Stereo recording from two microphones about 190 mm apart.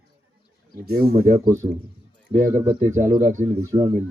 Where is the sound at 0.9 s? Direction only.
55° right (ahead or behind).